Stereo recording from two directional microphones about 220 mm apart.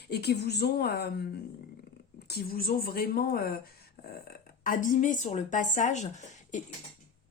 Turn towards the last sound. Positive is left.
turn(degrees=35)  # may be behind; listen again after turning